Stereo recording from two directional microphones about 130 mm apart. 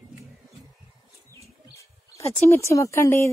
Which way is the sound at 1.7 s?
25° left (ahead or behind).